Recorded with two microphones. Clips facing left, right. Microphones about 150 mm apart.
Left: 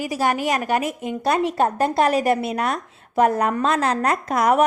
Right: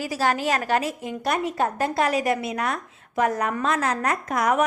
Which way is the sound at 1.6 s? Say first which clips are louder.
Left 4 dB; 25° left (ahead or behind).